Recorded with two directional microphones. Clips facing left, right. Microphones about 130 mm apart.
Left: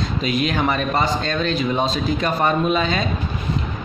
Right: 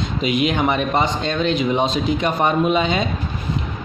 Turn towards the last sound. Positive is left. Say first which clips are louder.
# right 2 dB
turn(degrees=-20)  # may be behind; listen again after turning